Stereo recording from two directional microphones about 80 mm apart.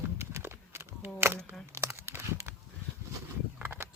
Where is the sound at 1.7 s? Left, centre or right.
Right.